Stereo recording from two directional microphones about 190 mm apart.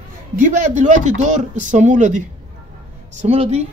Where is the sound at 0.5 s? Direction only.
40° right (ahead or behind).